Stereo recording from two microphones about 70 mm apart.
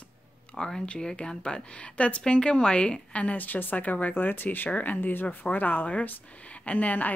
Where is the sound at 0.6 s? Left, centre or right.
Centre.